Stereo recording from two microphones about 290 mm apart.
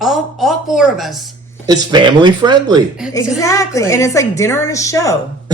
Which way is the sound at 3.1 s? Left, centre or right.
Centre.